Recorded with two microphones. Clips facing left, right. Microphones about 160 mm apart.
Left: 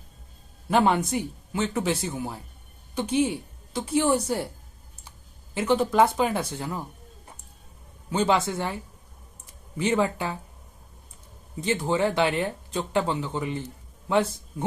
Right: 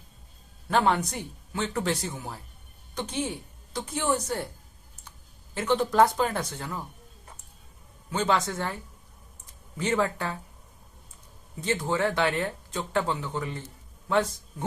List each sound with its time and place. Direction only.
0.7 s speech: 10° left (ahead or behind)
5.5 s speech: 5° left (ahead or behind)
8.4 s speech: 10° left (ahead or behind)
11.6 s speech: 15° left (ahead or behind)